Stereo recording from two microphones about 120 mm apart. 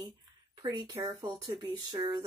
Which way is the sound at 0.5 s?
35° right (ahead or behind).